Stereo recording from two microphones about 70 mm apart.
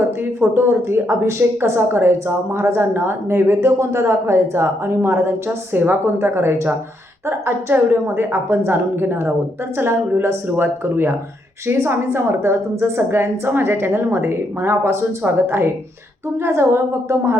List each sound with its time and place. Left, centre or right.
0.3 s a woman's voice: right
5.5 s a woman's voice: right